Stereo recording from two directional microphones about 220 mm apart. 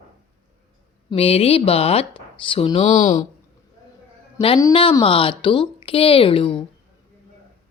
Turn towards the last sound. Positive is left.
turn(degrees=25)  # may be behind; listen again after turning